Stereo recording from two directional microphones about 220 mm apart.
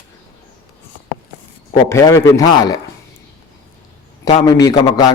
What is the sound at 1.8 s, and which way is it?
Speech, 15° left (ahead or behind).